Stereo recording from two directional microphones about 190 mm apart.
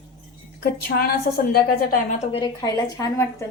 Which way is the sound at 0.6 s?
55° left (ahead or behind).